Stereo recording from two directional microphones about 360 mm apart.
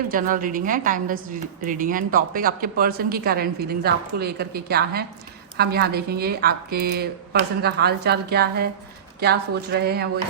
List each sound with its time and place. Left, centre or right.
0.1 s a woman's voice: right